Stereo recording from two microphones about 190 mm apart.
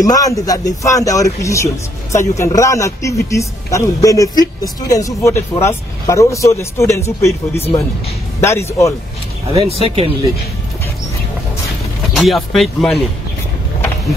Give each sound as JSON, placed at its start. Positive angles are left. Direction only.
{"t": 0.0, "sound": "speech", "side_deg": 15}
{"t": 9.5, "sound": "speech", "side_deg": -30}
{"t": 12.1, "sound": "speech", "side_deg": 0}